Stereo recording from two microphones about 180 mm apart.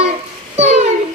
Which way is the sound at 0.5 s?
35° right (ahead or behind).